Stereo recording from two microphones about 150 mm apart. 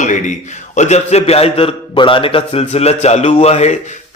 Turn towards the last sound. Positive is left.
turn(degrees=45)  # may be behind; listen again after turning